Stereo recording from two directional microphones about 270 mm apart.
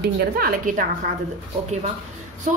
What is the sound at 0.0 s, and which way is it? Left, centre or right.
Speech, right.